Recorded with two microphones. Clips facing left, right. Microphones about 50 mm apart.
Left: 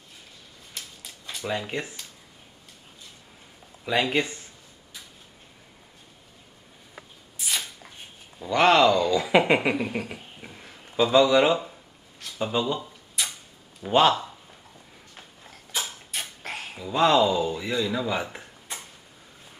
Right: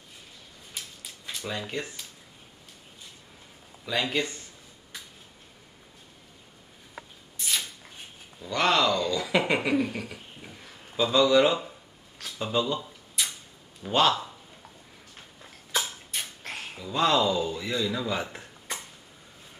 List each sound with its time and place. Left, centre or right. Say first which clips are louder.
1.4 s speech: left 4 dB; centre
4.0 s speech: left 3 dB; left
7.3 s shuffling cards: left 1 dB; centre
8.4 s speech: left 6 dB; left
11.0 s speech: left 2 dB; centre
13.2 s a sound: left 1 dB; centre
13.8 s speech: left 4 dB; centre
16.1 s a sound: left 2 dB; centre
16.8 s speech: left 4 dB; centre